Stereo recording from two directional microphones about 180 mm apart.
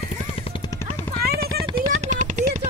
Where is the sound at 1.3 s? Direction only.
60° right (ahead or behind).